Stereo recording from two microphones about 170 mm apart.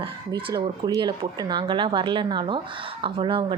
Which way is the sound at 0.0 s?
25° right (ahead or behind).